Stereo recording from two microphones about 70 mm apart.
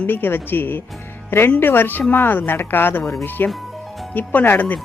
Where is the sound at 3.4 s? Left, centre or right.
Centre.